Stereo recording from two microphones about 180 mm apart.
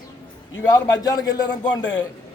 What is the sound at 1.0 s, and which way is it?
Speech, 20° left (ahead or behind).